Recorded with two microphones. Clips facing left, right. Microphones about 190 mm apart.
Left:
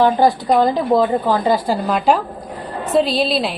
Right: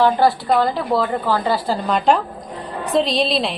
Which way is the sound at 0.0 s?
15° left (ahead or behind).